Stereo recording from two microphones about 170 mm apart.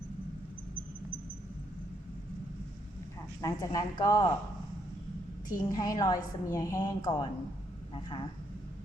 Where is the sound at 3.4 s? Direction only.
20° left (ahead or behind).